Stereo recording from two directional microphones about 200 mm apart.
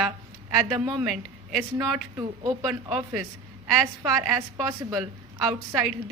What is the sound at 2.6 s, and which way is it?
Speech, centre (ahead or behind).